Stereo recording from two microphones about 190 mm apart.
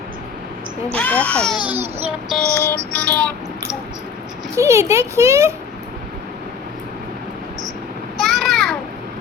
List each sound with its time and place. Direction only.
0.9 s speech: 5° left (ahead or behind)
2.0 s child singing: centre (ahead or behind)
2.6 s speech: 5° left (ahead or behind)
4.5 s a child's voice: 15° right (ahead or behind)
8.2 s a sound: centre (ahead or behind)